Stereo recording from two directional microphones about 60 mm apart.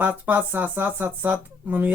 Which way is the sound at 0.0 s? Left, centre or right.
Right.